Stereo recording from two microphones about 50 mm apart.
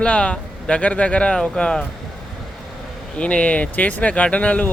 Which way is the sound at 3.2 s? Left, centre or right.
Left.